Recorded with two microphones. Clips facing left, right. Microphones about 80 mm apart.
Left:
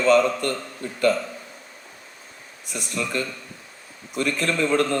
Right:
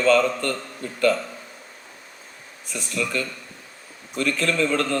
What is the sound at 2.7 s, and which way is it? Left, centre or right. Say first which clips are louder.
A man's voice: right 1 dB; centre.